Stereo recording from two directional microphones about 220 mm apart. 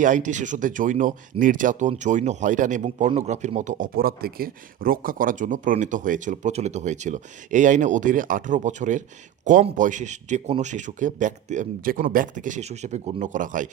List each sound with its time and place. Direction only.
0.0 s speech: 35° right (ahead or behind)